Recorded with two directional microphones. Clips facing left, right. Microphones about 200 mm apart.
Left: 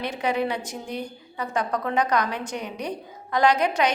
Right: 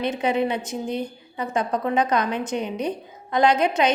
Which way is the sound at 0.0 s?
20° right (ahead or behind).